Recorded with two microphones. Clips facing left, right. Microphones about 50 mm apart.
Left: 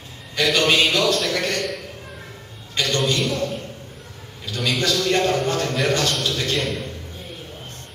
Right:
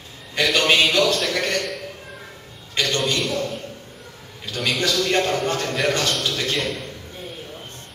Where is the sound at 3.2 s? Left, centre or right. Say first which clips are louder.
Left 1 dB; centre.